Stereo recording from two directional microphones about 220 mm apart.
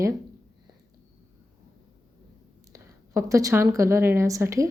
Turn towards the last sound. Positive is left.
turn(degrees=-15)  # may be behind; listen again after turning